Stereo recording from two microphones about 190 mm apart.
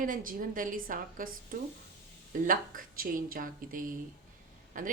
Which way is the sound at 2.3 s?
45° right (ahead or behind).